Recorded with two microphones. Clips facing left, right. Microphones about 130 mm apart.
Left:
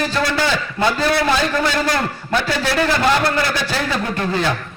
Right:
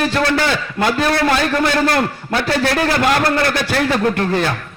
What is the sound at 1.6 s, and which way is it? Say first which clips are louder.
A man's voice: right 3 dB; 55° right (ahead or behind).